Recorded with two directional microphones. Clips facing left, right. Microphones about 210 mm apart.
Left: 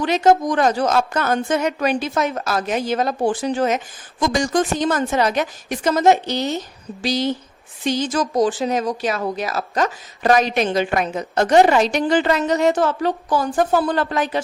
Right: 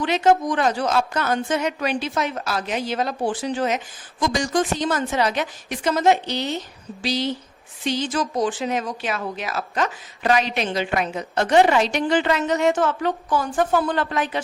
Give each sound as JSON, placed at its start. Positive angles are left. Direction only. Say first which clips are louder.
{"t": 0.0, "sound": "a woman's voice", "louder": "left 3 dB", "side_deg": 40}